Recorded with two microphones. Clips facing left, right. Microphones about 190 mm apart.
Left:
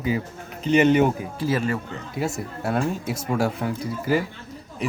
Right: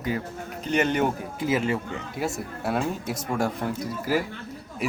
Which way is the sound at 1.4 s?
20° right (ahead or behind).